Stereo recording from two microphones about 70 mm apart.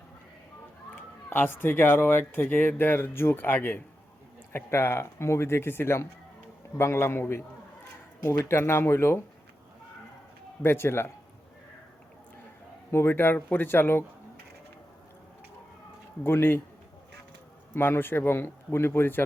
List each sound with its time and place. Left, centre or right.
0.9 s speech: left
10.6 s speech: left
12.9 s speech: left
16.2 s speech: left
17.7 s speech: left